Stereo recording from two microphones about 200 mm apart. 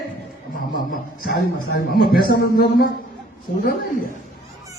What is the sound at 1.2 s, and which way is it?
A man's voice, 50° left (ahead or behind).